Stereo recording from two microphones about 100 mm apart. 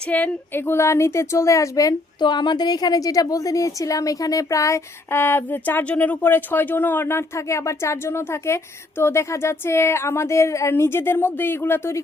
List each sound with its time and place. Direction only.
0.1 s a woman's voice: 20° left (ahead or behind)